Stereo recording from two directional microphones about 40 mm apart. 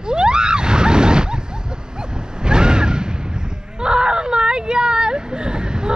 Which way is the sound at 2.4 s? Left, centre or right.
Right.